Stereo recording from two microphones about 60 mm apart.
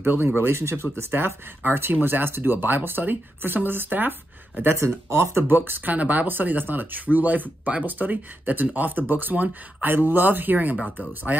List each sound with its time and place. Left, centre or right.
0.0 s speech: right
4.7 s speech: right
5.5 s speech: right